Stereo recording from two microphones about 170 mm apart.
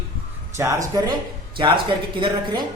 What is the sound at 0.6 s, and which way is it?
Speech, 20° right (ahead or behind).